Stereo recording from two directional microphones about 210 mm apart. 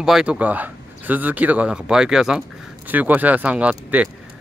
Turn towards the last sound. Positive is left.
turn(degrees=-5)  # may be behind; listen again after turning